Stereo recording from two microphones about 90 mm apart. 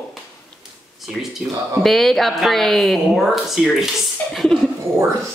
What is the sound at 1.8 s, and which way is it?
Speech, 5° left (ahead or behind).